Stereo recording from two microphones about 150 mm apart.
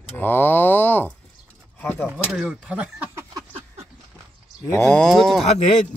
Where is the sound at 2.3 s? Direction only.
5° right (ahead or behind).